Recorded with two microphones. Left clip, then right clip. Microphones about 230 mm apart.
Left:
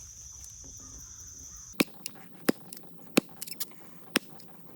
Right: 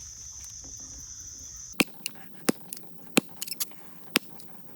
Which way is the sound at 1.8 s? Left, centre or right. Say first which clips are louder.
Right 3 dB; centre.